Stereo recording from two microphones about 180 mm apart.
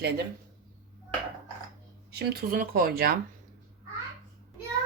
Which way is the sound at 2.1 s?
55° right (ahead or behind).